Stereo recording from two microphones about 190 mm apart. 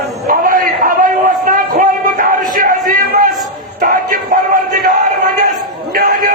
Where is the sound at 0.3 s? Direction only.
45° right (ahead or behind).